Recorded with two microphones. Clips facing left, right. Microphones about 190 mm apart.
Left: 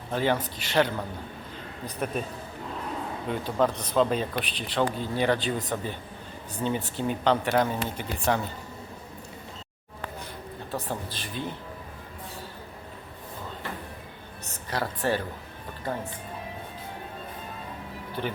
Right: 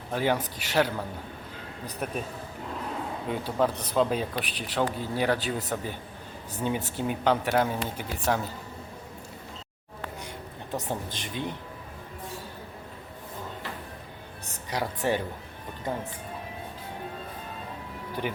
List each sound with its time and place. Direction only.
0.1 s a man's voice: 10° right (ahead or behind)
3.2 s a man's voice: 5° right (ahead or behind)
6.6 s a man's voice: 10° right (ahead or behind)
10.7 s speech: 20° right (ahead or behind)
14.7 s a man's voice: 15° right (ahead or behind)